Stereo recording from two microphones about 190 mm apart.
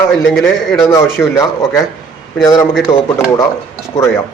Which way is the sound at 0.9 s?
15° left (ahead or behind).